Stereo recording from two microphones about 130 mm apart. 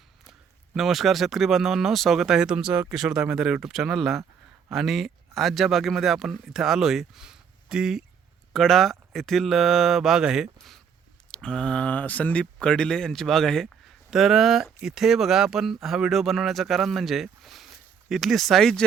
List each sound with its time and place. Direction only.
0.3 s speech: centre (ahead or behind)